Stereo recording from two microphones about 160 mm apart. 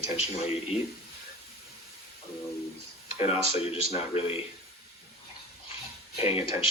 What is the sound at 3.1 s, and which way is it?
Speech, 40° left (ahead or behind).